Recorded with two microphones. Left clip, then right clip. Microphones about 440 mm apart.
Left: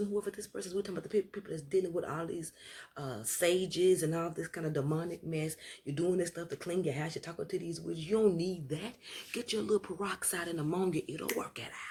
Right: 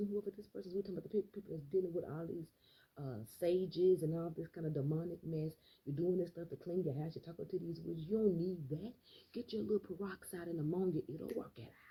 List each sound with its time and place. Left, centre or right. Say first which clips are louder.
0.3 s speech: left 7 dB; left